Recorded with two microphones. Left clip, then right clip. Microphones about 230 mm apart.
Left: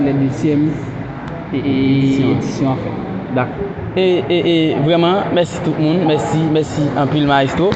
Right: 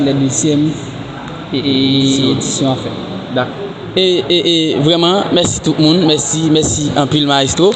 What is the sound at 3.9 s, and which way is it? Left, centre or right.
A man's voice, right.